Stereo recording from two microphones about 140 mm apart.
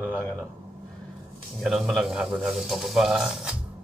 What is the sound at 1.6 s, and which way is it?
A man's voice, 5° right (ahead or behind).